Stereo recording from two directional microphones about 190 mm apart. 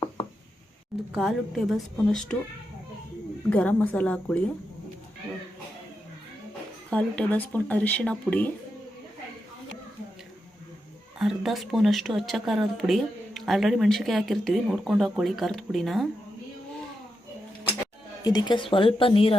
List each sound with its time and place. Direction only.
1.1 s speech: centre (ahead or behind)
3.5 s speech: 5° left (ahead or behind)
6.9 s speech: 5° left (ahead or behind)
11.2 s speech: centre (ahead or behind)
18.2 s speech: 20° left (ahead or behind)